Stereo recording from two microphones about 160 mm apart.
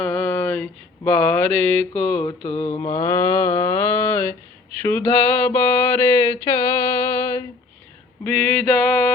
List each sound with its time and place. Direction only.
0.0 s mantra: 10° left (ahead or behind)
1.9 s mantra: 25° left (ahead or behind)
4.8 s a sound: 15° left (ahead or behind)
8.2 s male singing: 10° left (ahead or behind)